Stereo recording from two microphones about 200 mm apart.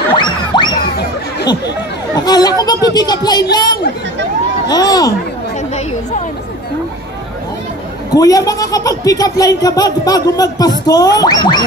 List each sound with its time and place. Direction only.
0.2 s music: 20° left (ahead or behind)
2.2 s speech: 20° left (ahead or behind)
8.1 s speech: 20° left (ahead or behind)